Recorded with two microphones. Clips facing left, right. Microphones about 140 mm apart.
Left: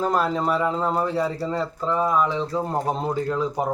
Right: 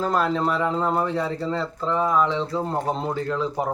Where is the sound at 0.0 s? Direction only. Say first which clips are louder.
Even; 10° left (ahead or behind).